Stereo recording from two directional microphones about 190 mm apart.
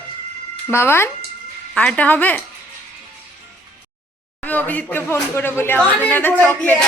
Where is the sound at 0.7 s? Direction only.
15° left (ahead or behind).